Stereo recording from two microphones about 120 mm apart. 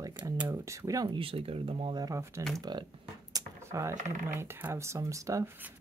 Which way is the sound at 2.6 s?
35° right (ahead or behind).